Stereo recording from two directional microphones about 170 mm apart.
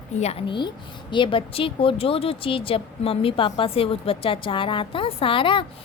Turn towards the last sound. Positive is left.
turn(degrees=30)  # may be behind; listen again after turning